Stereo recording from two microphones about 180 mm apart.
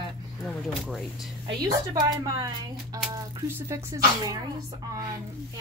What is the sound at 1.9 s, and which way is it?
Speech, 20° right (ahead or behind).